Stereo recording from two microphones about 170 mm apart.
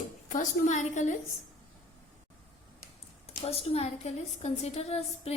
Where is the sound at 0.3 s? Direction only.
45° left (ahead or behind).